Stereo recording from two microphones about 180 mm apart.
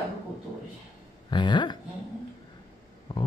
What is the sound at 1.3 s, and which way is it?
Speech, 25° left (ahead or behind).